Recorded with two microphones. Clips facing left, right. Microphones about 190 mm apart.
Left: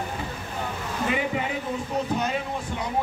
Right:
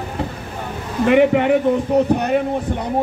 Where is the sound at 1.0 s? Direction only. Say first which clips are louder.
Right 14 dB; 65° right (ahead or behind).